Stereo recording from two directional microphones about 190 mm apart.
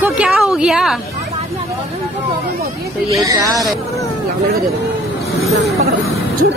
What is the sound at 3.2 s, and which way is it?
Speech, 20° right (ahead or behind).